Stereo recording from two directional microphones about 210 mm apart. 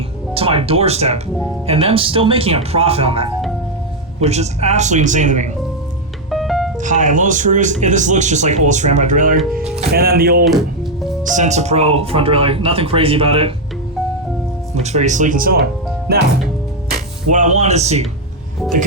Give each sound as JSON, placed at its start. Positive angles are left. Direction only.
{"t": 0.3, "sound": "speech", "side_deg": -25}
{"t": 6.3, "sound": "music", "side_deg": 0}
{"t": 6.7, "sound": "speech", "side_deg": -35}
{"t": 9.4, "sound": "speech", "side_deg": 0}
{"t": 9.9, "sound": "speech", "side_deg": -45}
{"t": 14.8, "sound": "speech", "side_deg": -30}
{"t": 17.3, "sound": "speech", "side_deg": -35}